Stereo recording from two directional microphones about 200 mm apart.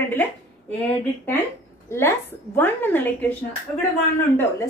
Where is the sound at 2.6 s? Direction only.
10° left (ahead or behind).